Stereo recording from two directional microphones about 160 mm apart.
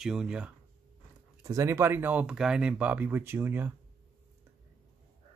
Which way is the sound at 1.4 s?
20° right (ahead or behind).